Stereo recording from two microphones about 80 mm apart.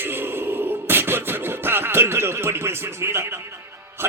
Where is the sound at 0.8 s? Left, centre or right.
Right.